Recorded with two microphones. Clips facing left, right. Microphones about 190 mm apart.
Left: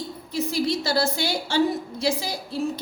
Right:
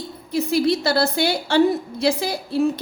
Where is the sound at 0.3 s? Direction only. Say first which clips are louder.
Right 6 dB; 60° right (ahead or behind).